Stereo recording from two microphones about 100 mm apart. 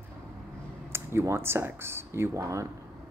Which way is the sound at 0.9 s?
25° right (ahead or behind).